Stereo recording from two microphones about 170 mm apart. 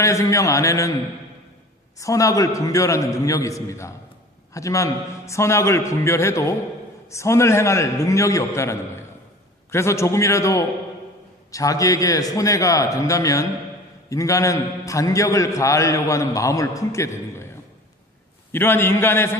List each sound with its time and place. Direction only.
0.0 s a man's voice: 20° left (ahead or behind)
2.0 s a man's voice: 20° left (ahead or behind)
18.5 s a man's voice: 15° left (ahead or behind)